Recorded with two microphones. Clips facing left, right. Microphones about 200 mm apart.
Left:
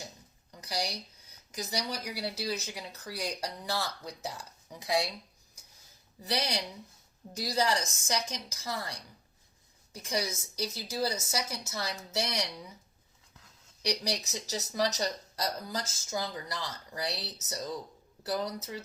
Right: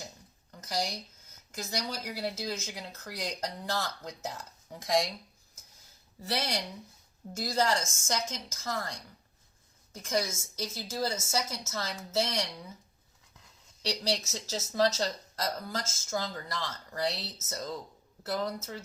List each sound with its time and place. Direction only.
0.6 s a sound: 15° left (ahead or behind)
1.5 s speech: 15° left (ahead or behind)
6.2 s speech: 15° left (ahead or behind)
13.8 s speech: 15° left (ahead or behind)